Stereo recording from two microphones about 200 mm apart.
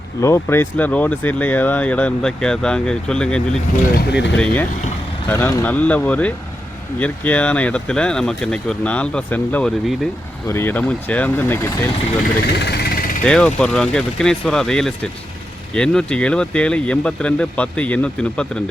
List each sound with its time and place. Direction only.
0.2 s speech: 15° left (ahead or behind)
3.9 s speech: 60° left (ahead or behind)
4.4 s speech: 5° left (ahead or behind)
12.5 s vehicle: 55° left (ahead or behind)
13.2 s speech: 5° left (ahead or behind)